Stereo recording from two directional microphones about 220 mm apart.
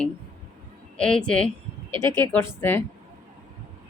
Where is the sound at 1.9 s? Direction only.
20° right (ahead or behind).